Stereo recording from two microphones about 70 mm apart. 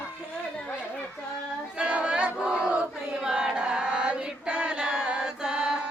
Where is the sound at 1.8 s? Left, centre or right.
Centre.